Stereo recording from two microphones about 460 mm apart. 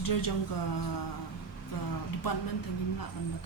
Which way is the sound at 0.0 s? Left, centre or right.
Left.